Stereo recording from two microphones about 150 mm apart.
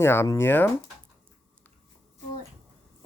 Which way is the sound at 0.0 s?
15° left (ahead or behind).